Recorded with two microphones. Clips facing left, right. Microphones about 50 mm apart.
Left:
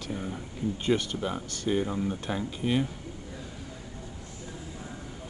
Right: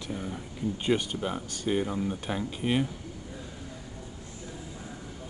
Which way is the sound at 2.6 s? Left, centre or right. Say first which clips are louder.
Even; right.